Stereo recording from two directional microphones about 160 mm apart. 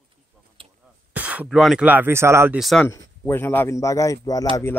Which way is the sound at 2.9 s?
15° left (ahead or behind).